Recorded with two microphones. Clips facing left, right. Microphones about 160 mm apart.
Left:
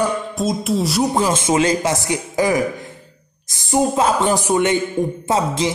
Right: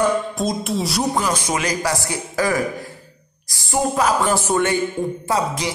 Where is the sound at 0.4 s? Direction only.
Centre (ahead or behind).